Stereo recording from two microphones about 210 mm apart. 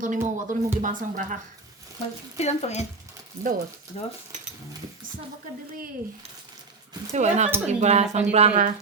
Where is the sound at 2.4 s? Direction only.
30° left (ahead or behind).